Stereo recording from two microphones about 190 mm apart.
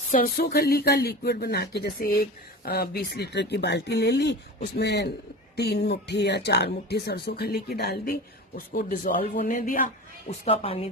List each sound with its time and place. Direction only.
0.1 s speech: 50° left (ahead or behind)
10.2 s a woman's voice: 30° left (ahead or behind)